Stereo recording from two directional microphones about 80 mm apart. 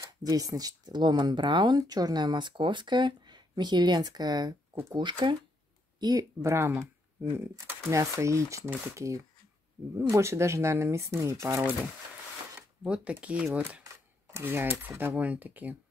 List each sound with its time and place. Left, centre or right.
0.2 s speech: right
4.9 s speech: right
5.9 s speech: right
6.4 s speech: right
12.5 s speech: centre